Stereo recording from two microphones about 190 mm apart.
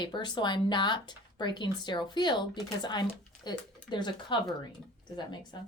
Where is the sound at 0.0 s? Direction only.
25° left (ahead or behind).